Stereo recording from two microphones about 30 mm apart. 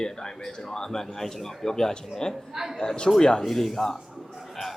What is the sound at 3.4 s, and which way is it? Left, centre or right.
Speech, centre.